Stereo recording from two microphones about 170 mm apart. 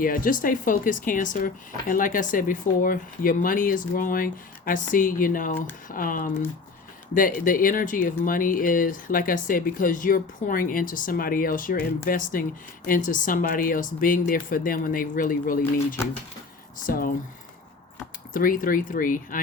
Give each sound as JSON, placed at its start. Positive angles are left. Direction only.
{"t": 0.0, "sound": "speech", "side_deg": 55}
{"t": 18.3, "sound": "speech", "side_deg": 55}